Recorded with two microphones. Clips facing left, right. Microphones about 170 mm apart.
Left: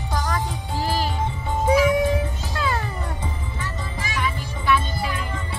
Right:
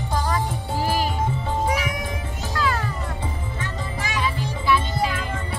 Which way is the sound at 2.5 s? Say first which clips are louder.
Right 1 dB; 25° left (ahead or behind).